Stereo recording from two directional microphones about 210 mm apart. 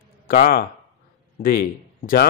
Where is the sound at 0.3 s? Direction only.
45° left (ahead or behind).